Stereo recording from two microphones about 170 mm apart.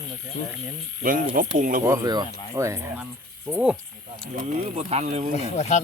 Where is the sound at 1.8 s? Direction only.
20° right (ahead or behind).